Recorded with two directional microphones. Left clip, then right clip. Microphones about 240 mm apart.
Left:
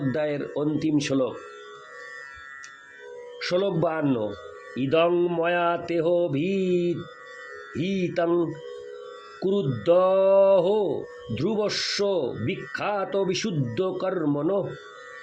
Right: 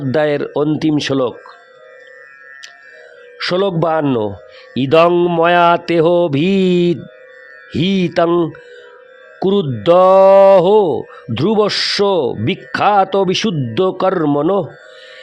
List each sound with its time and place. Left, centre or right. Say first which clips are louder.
0.1 s mantra: right 14 dB; right
3.3 s speech: right 9 dB; right
4.7 s mantra: right 11 dB; right
9.4 s speech: right 10 dB; right